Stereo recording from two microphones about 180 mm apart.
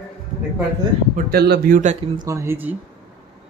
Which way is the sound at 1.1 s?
60° right (ahead or behind).